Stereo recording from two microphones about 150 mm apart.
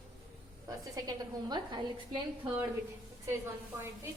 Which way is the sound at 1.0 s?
25° right (ahead or behind).